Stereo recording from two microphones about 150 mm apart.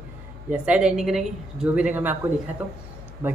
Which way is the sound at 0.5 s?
10° right (ahead or behind).